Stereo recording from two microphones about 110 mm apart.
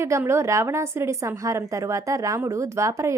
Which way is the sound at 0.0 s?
25° right (ahead or behind).